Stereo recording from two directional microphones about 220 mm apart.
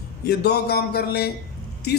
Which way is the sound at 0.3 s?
45° left (ahead or behind).